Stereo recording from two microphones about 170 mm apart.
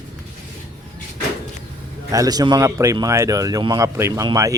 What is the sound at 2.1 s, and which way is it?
Speech, 20° right (ahead or behind).